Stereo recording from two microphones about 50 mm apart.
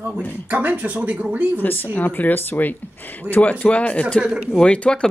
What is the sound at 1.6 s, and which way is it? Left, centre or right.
Speech, left.